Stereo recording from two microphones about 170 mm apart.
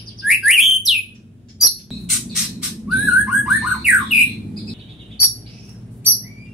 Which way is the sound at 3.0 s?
Centre (ahead or behind).